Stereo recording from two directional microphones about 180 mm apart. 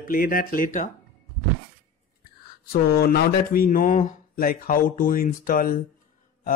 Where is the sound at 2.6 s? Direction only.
60° left (ahead or behind).